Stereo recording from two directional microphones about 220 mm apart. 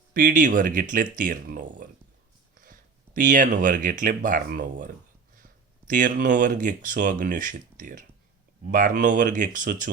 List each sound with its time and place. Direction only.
0.1 s speech: 40° right (ahead or behind)
2.6 s a sound: 40° right (ahead or behind)
3.2 s speech: 35° right (ahead or behind)